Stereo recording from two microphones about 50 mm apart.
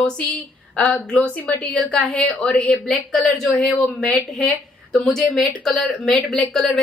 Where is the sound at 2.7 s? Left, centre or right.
Centre.